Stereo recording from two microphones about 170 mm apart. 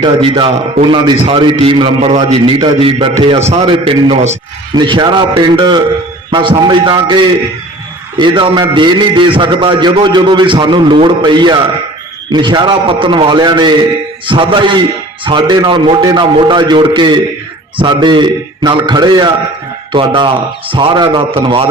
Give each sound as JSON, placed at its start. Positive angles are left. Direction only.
{"t": 0.0, "sound": "a man's voice", "side_deg": -30}
{"t": 4.7, "sound": "a man's voice", "side_deg": -25}